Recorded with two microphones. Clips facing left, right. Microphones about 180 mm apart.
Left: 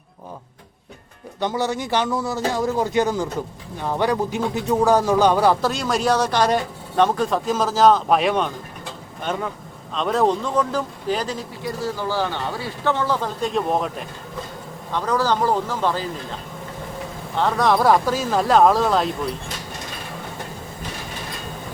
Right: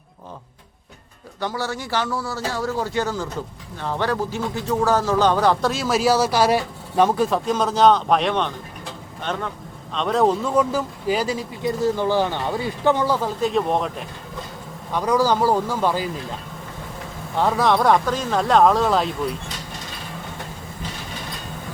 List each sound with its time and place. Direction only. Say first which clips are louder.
1.4 s speech: left 4 dB; 20° left (ahead or behind); by 11.4 s 10° right (ahead or behind)
11.6 s speech: right 6 dB; 20° right (ahead or behind); by 14.0 s centre (ahead or behind)
14.9 s speech: right 2 dB; 10° right (ahead or behind)
17.3 s speech: even; 5° right (ahead or behind)